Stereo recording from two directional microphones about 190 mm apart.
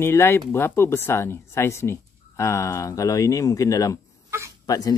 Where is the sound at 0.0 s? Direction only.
15° left (ahead or behind).